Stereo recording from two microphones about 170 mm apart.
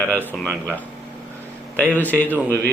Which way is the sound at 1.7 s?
10° left (ahead or behind).